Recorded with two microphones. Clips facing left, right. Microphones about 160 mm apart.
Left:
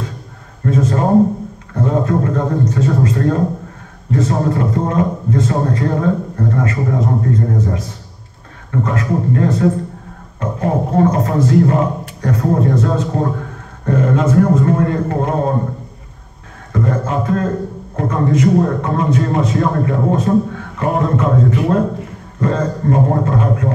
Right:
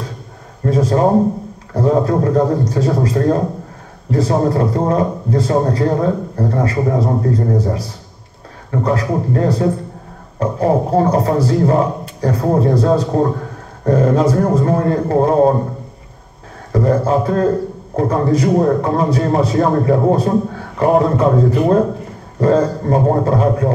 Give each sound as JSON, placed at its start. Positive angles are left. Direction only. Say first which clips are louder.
{"t": 0.7, "sound": "a sound", "louder": "right 2 dB", "side_deg": -35}
{"t": 1.7, "sound": "a man's voice", "louder": "right 2 dB", "side_deg": -35}
{"t": 16.7, "sound": "a man's voice", "louder": "right 4 dB", "side_deg": -35}